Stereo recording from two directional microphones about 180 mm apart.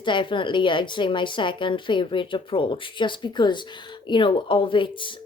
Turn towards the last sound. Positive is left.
turn(degrees=25)  # may be behind; listen again after turning